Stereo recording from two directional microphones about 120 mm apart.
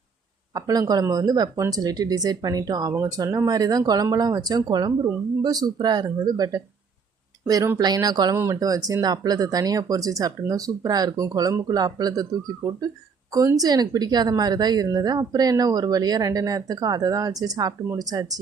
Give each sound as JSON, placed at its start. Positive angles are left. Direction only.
{"t": 0.5, "sound": "a woman's voice", "side_deg": -30}
{"t": 13.3, "sound": "a woman's voice", "side_deg": -30}